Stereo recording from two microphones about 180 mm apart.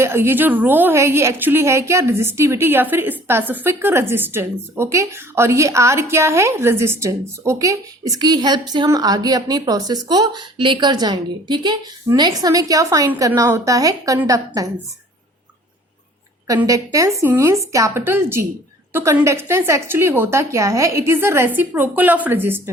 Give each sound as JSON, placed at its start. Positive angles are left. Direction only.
{"t": 0.0, "sound": "a woman's voice", "side_deg": -15}
{"t": 16.5, "sound": "a woman's voice", "side_deg": -20}